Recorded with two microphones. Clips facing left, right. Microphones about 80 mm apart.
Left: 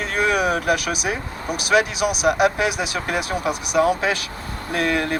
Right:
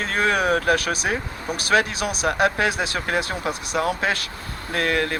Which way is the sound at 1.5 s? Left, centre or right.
Centre.